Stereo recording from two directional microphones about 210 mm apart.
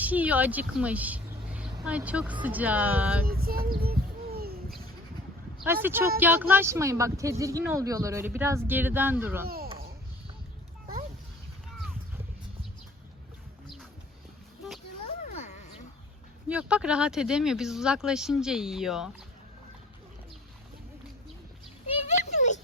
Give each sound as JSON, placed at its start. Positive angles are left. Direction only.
{"t": 0.0, "sound": "speech", "side_deg": -5}
{"t": 3.2, "sound": "child singing", "side_deg": -45}
{"t": 5.8, "sound": "speech", "side_deg": -10}
{"t": 15.2, "sound": "a sound", "side_deg": 35}
{"t": 16.5, "sound": "speech", "side_deg": -5}
{"t": 21.9, "sound": "a sound", "side_deg": 35}